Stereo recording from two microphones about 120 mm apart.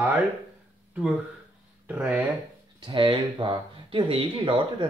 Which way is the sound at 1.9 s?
15° right (ahead or behind).